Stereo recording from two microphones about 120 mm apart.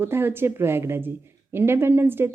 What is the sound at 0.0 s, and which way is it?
A woman's voice, 20° right (ahead or behind).